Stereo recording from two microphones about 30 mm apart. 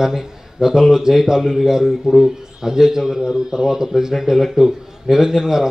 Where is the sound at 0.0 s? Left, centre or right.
Centre.